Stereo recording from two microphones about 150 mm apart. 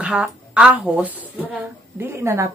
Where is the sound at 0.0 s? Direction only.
5° right (ahead or behind).